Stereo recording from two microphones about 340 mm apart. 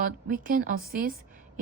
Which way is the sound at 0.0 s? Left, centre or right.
Right.